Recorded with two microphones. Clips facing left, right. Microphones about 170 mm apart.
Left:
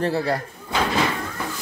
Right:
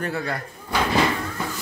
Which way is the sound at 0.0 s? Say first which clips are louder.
Left 5 dB; 30° left (ahead or behind).